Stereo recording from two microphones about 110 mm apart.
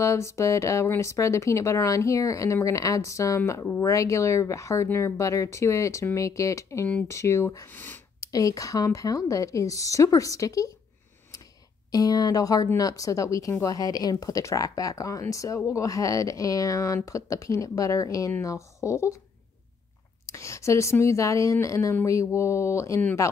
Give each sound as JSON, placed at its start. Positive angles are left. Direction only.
{"t": 0.0, "sound": "speech", "side_deg": 25}
{"t": 8.2, "sound": "speech", "side_deg": 30}
{"t": 11.9, "sound": "speech", "side_deg": 35}
{"t": 20.2, "sound": "speech", "side_deg": 25}